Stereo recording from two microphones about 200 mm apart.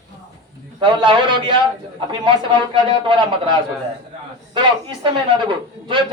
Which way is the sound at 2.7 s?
25° right (ahead or behind).